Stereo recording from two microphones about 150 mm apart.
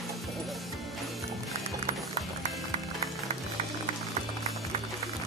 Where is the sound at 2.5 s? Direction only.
Centre (ahead or behind).